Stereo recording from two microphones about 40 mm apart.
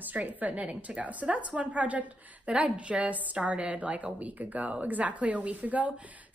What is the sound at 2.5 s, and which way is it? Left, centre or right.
A woman's voice, right.